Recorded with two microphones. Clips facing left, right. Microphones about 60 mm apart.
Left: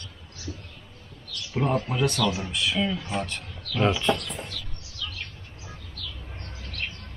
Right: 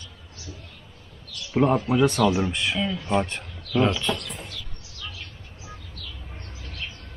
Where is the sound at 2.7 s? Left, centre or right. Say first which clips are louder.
Right 5 dB; centre.